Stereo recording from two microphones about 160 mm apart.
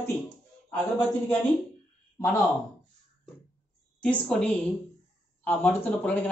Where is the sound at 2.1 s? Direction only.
15° left (ahead or behind).